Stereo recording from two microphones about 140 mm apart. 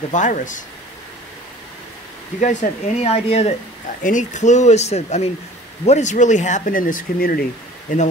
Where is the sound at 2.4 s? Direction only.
60° left (ahead or behind).